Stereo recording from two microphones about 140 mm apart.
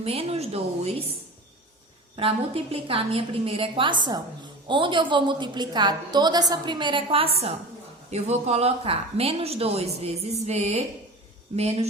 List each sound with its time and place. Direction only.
0.0 s speech: 45° right (ahead or behind)
2.1 s a woman's voice: 40° right (ahead or behind)